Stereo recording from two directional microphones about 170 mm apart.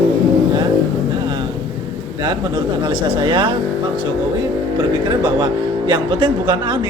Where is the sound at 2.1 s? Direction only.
25° right (ahead or behind).